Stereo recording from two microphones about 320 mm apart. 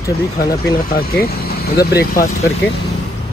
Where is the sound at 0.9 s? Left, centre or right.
Left.